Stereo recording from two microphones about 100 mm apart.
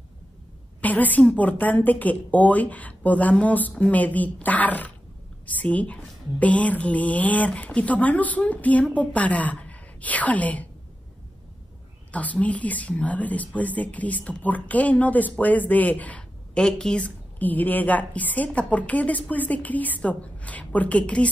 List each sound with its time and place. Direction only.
0.7 s a woman's voice: 15° left (ahead or behind)
12.1 s speech: 15° left (ahead or behind)